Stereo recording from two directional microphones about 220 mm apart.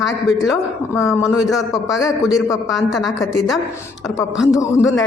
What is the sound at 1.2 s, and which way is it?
Speech, centre (ahead or behind).